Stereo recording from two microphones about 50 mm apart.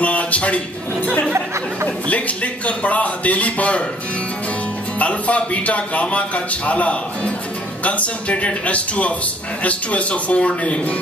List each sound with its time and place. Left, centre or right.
0.0 s a sound: left
2.0 s speech: left
4.9 s speech: left